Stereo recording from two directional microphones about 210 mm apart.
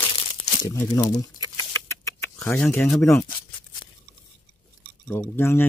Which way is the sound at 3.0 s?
15° left (ahead or behind).